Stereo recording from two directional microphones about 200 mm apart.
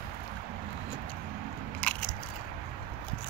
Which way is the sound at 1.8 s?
5° left (ahead or behind).